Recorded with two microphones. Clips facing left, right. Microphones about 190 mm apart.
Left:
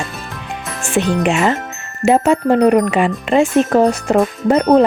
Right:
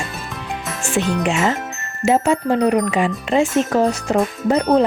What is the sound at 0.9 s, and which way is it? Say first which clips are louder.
Speech: left 4 dB; 60° left (ahead or behind).